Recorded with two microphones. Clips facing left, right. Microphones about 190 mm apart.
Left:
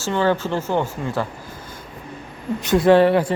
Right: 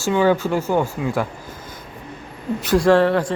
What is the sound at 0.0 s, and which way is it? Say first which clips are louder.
Speech: right 3 dB; 10° right (ahead or behind).